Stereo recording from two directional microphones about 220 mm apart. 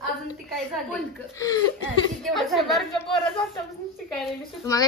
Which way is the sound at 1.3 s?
15° left (ahead or behind).